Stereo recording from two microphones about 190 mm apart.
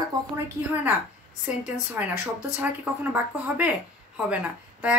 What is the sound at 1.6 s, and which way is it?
Speech, 10° right (ahead or behind).